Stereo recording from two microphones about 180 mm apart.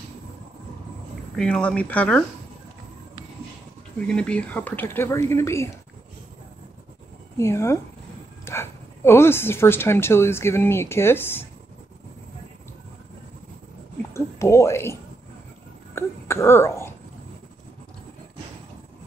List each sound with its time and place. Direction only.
1.3 s speech: 5° left (ahead or behind)
4.1 s a woman's voice: 5° left (ahead or behind)
7.3 s a woman's voice: 15° left (ahead or behind)
14.1 s speech: 15° left (ahead or behind)
15.9 s a sound: 15° left (ahead or behind)